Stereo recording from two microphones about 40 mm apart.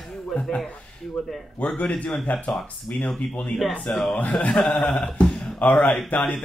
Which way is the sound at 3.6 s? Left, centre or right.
Centre.